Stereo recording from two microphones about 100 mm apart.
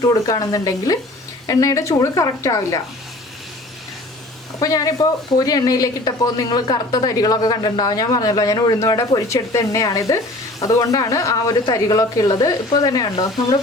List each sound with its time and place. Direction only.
0.0 s a woman's voice: 35° left (ahead or behind)
4.6 s a woman's voice: 35° left (ahead or behind)